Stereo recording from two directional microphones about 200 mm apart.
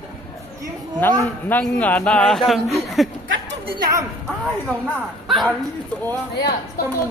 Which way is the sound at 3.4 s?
25° right (ahead or behind).